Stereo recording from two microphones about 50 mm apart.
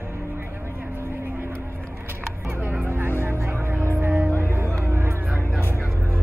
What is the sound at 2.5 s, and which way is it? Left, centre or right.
Music, right.